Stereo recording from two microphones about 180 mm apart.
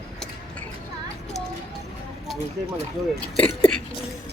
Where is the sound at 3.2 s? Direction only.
10° left (ahead or behind).